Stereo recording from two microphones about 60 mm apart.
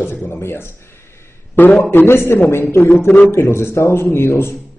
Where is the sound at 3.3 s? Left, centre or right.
Left.